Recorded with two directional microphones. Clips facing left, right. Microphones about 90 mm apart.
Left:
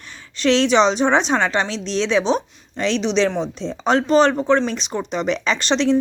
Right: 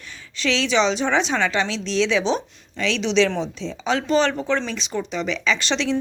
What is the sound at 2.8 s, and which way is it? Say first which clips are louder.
Speech: left 1 dB; 50° left (ahead or behind).